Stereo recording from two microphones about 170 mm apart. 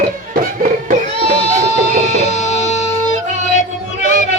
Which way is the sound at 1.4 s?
40° left (ahead or behind).